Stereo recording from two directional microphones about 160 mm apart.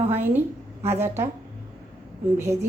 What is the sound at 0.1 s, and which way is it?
A woman's voice, 10° right (ahead or behind).